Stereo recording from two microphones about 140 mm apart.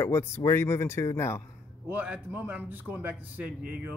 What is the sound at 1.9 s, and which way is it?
A man's voice, 10° right (ahead or behind).